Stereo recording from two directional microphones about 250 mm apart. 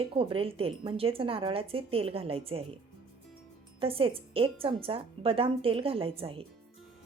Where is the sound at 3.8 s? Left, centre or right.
Right.